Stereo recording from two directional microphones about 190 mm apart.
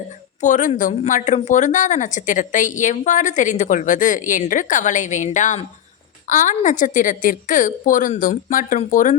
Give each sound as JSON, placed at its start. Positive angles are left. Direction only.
{"t": 0.4, "sound": "a woman's voice", "side_deg": 40}